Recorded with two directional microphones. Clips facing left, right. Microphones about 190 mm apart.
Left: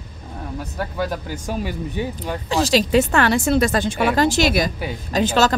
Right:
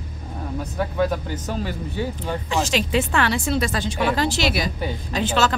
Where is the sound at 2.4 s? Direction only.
35° left (ahead or behind).